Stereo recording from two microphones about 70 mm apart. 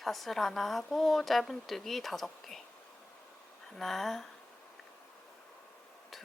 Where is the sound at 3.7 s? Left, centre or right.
Centre.